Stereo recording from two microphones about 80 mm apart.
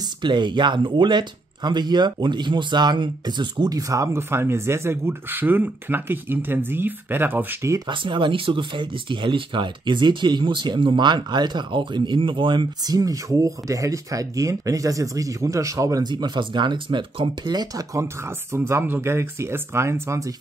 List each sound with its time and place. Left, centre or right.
0.2 s speech: right
7.9 s speech: right
12.8 s speech: right
16.0 s speech: right
17.5 s speech: right
18.5 s speech: right